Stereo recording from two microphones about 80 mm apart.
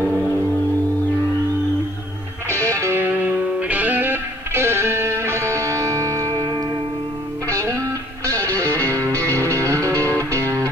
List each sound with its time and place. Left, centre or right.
2.7 s music: right
3.0 s music: right
8.6 s music: left
8.9 s music: right